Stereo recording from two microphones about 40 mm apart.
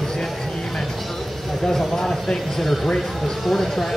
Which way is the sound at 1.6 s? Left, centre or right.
Centre.